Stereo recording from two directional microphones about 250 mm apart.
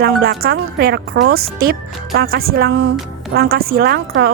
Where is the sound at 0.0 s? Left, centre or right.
Right.